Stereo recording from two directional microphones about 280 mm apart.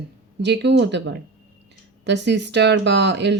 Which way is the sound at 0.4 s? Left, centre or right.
Right.